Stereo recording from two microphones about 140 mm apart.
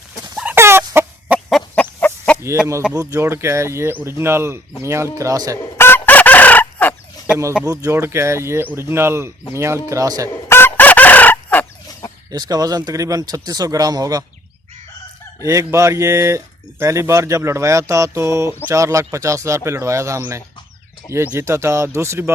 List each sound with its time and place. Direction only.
0.5 s chicken: 15° right (ahead or behind)
1.5 s chicken: 5° left (ahead or behind)
2.9 s speech: 20° right (ahead or behind)
5.5 s chicken: 15° left (ahead or behind)
7.6 s speech: 20° right (ahead or behind)
10.2 s chicken: 15° left (ahead or behind)
12.3 s speech: 25° right (ahead or behind)
15.4 s speech: 20° right (ahead or behind)